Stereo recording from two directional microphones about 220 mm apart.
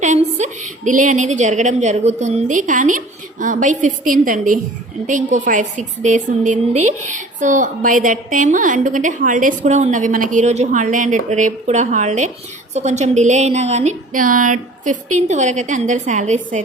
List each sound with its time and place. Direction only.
0.0 s a woman's voice: 35° right (ahead or behind)